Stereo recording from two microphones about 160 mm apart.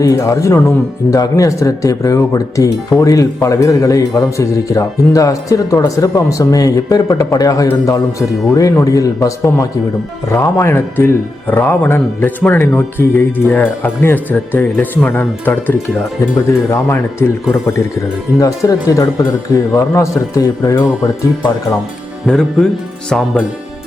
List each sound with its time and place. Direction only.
0.0 s speech: 20° left (ahead or behind)
22.3 s speech: 5° left (ahead or behind)